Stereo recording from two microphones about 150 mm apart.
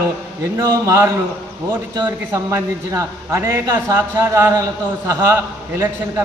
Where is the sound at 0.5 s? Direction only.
20° right (ahead or behind).